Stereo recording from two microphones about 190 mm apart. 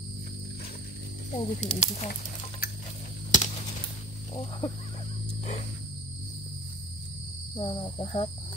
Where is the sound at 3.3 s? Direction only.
40° left (ahead or behind).